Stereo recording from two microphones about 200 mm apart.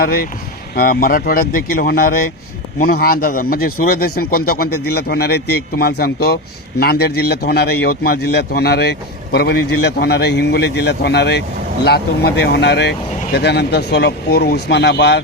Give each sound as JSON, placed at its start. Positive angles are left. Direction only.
{"t": 0.0, "sound": "speech", "side_deg": 50}